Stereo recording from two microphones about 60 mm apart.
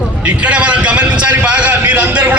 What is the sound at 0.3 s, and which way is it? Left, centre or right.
A man's voice, right.